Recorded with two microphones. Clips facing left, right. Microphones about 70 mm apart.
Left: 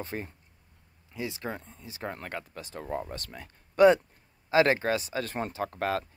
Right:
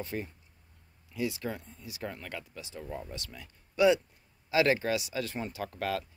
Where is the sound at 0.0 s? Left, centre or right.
Left.